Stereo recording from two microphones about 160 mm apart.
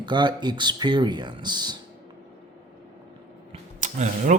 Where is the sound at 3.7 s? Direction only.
50° right (ahead or behind).